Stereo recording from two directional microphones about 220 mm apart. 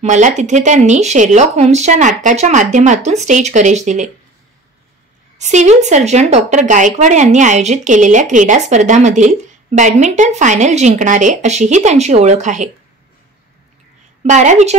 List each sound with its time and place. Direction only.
0.0 s a woman's voice: 35° right (ahead or behind)
5.4 s a woman's voice: 30° right (ahead or behind)
14.2 s a woman's voice: 35° right (ahead or behind)